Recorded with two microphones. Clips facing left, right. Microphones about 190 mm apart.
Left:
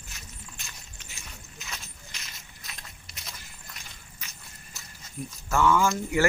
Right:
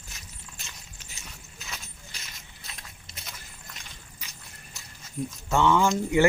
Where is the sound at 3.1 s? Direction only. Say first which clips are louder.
Right 2 dB; 25° right (ahead or behind).